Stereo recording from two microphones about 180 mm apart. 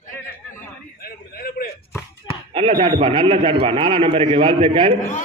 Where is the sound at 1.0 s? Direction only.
55° left (ahead or behind).